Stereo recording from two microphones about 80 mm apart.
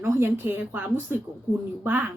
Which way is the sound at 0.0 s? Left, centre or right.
Right.